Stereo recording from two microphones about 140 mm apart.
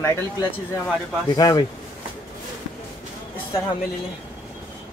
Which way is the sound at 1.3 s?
25° left (ahead or behind).